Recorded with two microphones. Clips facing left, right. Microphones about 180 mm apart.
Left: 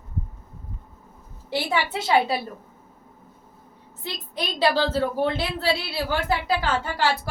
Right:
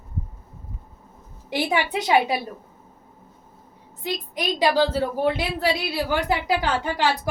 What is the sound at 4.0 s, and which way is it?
A woman's voice, 15° right (ahead or behind).